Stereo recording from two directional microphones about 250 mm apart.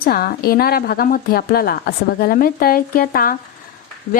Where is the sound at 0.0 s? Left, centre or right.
Left.